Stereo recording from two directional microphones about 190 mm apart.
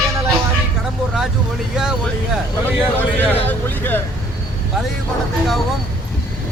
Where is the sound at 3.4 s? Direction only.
10° left (ahead or behind).